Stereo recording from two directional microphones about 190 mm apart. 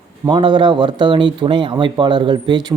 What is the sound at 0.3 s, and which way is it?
Speech, 25° right (ahead or behind).